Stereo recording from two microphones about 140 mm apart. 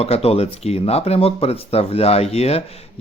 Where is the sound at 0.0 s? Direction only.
45° left (ahead or behind).